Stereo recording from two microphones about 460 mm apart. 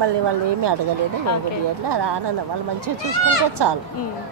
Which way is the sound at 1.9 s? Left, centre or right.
Right.